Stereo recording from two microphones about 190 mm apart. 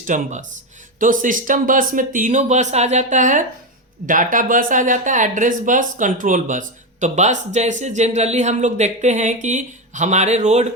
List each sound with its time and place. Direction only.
0.0 s speech: 45° right (ahead or behind)